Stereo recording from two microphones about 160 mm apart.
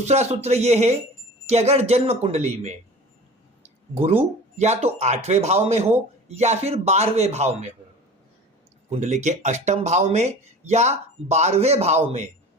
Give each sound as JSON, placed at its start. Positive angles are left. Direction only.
{"t": 0.0, "sound": "speech", "side_deg": -45}
{"t": 4.2, "sound": "speech", "side_deg": -45}
{"t": 8.9, "sound": "speech", "side_deg": -45}